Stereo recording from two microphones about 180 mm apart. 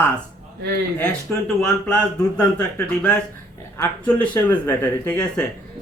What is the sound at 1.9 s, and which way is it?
A woman's voice, 10° left (ahead or behind).